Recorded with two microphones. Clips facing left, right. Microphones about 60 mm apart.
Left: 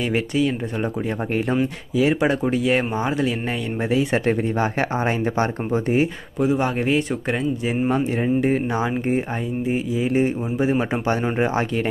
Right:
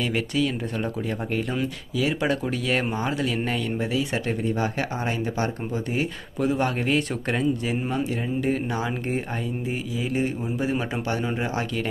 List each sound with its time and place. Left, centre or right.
0.0 s speech: left
3.9 s speech: left
6.4 s speech: centre
7.7 s speech: left
11.1 s speech: left